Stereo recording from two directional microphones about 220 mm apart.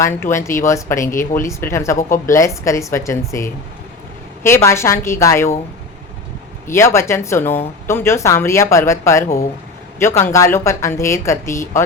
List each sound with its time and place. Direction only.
0.0 s a woman's voice: 10° left (ahead or behind)
6.7 s a woman's voice: 10° left (ahead or behind)